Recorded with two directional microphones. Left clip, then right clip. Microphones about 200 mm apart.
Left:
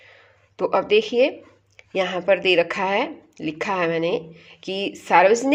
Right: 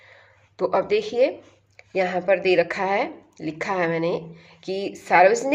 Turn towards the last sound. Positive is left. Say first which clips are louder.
# left 1 dB
turn(degrees=30)  # may be behind; listen again after turning